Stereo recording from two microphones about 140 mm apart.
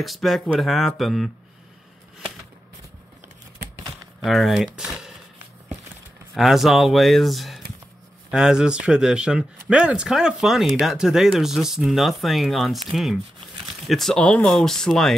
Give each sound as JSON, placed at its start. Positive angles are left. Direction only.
{"t": 0.0, "sound": "speech", "side_deg": 0}
{"t": 4.2, "sound": "speech", "side_deg": 0}
{"t": 4.7, "sound": "a sound", "side_deg": -5}
{"t": 6.3, "sound": "speech", "side_deg": 0}